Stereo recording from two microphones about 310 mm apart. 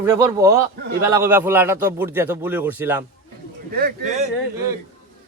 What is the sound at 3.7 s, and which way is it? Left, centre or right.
Speech, right.